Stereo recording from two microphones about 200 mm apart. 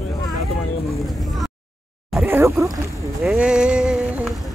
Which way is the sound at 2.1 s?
10° right (ahead or behind).